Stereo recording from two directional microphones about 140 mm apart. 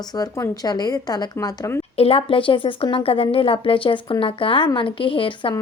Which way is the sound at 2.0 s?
45° left (ahead or behind).